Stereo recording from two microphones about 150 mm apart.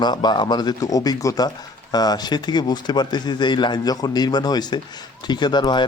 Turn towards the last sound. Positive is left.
turn(degrees=30)  # may be behind; listen again after turning